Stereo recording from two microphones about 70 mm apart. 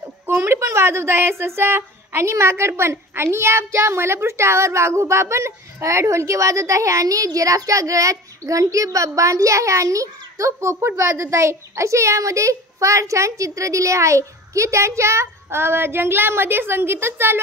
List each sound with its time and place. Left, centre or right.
0.4 s a woman's voice: right